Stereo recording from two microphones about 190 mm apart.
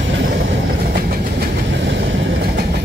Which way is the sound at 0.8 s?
50° right (ahead or behind).